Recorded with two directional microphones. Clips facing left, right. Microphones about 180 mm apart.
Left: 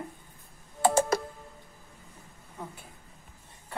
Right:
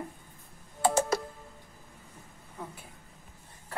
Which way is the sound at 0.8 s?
55° left (ahead or behind).